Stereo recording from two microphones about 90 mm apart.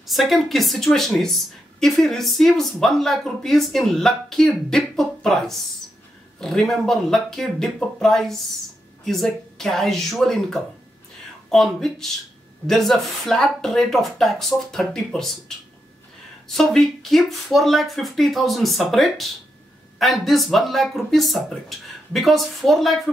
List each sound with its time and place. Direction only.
0.0 s a woman's voice: centre (ahead or behind)
6.4 s a woman's voice: 5° left (ahead or behind)